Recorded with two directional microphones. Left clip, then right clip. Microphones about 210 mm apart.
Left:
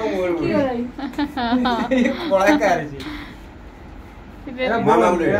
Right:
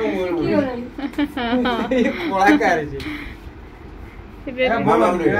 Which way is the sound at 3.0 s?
Centre (ahead or behind).